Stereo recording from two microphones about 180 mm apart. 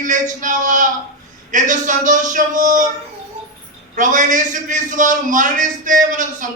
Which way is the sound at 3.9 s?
45° right (ahead or behind).